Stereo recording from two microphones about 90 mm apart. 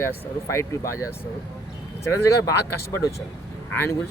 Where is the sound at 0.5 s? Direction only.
35° left (ahead or behind).